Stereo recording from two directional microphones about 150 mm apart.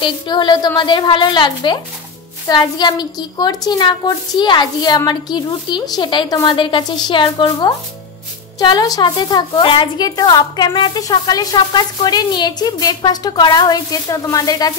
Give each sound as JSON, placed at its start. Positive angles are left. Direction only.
{"t": 0.0, "sound": "a woman's voice", "side_deg": 30}